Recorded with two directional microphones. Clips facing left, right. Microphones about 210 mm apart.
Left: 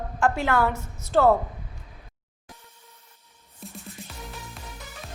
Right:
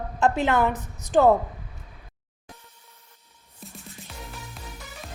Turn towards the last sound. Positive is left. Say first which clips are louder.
# left 3 dB
turn(degrees=0)  # may be behind; listen again after turning